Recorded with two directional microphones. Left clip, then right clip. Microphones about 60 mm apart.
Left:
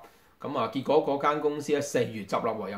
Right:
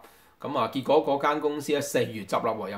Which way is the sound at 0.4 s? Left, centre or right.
Right.